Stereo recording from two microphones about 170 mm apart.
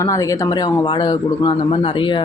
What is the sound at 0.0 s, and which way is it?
Speech, 20° left (ahead or behind).